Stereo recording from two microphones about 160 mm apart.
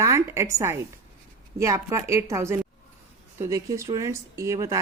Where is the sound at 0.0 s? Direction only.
20° right (ahead or behind).